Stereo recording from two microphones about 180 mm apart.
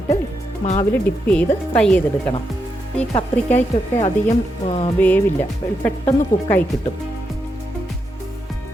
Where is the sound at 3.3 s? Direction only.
10° left (ahead or behind).